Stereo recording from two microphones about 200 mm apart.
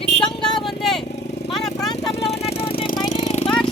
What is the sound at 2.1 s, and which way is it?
Music, 30° left (ahead or behind).